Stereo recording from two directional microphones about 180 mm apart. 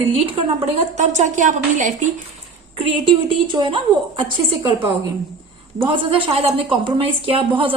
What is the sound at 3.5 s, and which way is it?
Speech, 25° right (ahead or behind).